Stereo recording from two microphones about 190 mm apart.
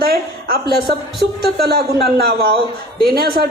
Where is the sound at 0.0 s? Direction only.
55° right (ahead or behind).